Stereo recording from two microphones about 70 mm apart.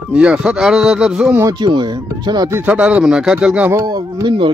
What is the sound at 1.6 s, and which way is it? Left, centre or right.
Speech, right.